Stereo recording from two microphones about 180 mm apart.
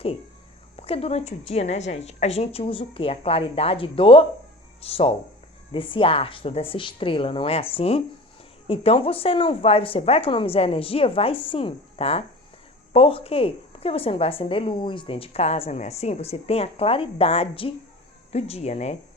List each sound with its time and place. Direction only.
0.8 s a woman's voice: 35° left (ahead or behind)